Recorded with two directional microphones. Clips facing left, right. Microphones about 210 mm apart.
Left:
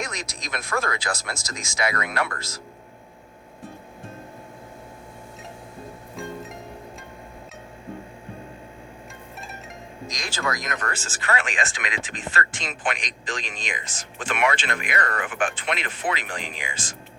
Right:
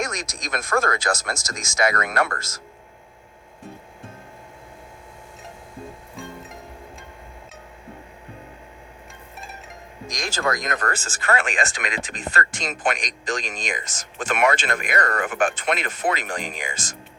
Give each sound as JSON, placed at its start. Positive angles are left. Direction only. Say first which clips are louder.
{"t": 0.0, "sound": "speech", "louder": "right 4 dB", "side_deg": -45}
{"t": 10.1, "sound": "speech", "louder": "right 4 dB", "side_deg": -45}
{"t": 10.8, "sound": "speech", "louder": "right 4 dB", "side_deg": -50}